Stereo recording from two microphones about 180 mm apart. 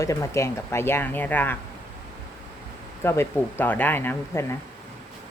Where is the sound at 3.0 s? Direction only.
15° left (ahead or behind).